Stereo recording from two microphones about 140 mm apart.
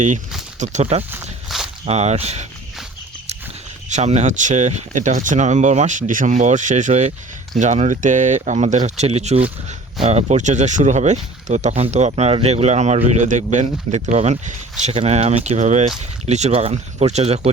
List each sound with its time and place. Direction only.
0.6 s speech: 55° right (ahead or behind)
1.5 s walk: centre (ahead or behind)
1.8 s speech: 50° right (ahead or behind)
3.8 s speech: 55° right (ahead or behind)